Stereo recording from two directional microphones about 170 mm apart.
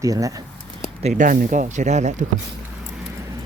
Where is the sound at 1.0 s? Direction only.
45° right (ahead or behind).